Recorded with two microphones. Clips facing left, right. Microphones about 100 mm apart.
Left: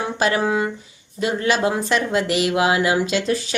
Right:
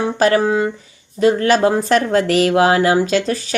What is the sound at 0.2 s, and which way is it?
A woman's voice, 40° right (ahead or behind).